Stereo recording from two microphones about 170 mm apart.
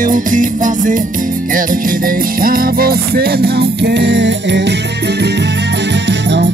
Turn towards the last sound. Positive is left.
turn(degrees=-90)